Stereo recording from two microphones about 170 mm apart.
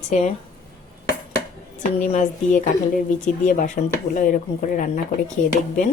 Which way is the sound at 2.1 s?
45° left (ahead or behind).